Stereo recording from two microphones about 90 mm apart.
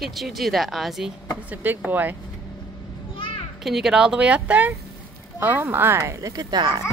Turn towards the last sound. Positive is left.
turn(degrees=-50)  # may be behind; listen again after turning